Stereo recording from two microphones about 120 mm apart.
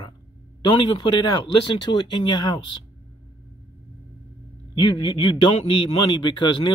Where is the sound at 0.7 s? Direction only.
45° left (ahead or behind).